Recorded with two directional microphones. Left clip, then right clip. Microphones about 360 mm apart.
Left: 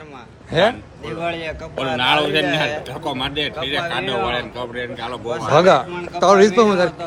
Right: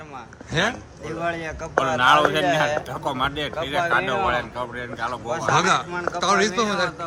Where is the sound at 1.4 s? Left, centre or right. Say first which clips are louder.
Right 2 dB; right.